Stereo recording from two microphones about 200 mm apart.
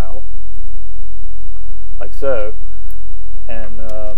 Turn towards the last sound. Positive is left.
turn(degrees=-15)  # may be behind; listen again after turning